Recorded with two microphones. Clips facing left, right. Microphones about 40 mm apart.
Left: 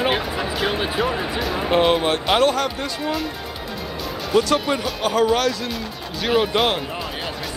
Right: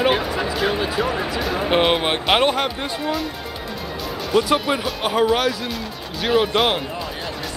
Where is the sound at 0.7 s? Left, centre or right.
Centre.